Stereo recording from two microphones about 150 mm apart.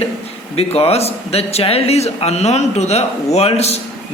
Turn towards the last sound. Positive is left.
turn(degrees=45)  # may be behind; listen again after turning